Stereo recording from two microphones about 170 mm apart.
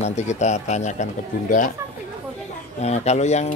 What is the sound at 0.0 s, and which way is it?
Speech, 40° left (ahead or behind).